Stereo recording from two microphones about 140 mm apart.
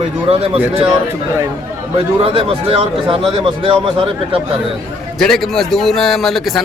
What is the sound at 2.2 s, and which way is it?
Speech, 40° right (ahead or behind).